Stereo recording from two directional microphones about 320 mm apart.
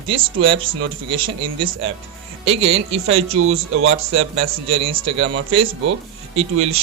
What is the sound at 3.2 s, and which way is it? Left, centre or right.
A man's voice, right.